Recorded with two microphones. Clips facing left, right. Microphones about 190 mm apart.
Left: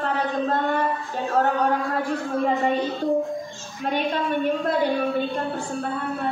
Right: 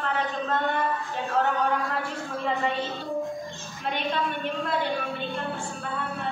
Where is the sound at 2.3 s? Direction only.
50° left (ahead or behind).